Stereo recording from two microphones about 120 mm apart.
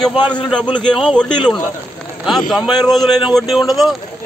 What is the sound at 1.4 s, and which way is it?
Speech, 40° left (ahead or behind).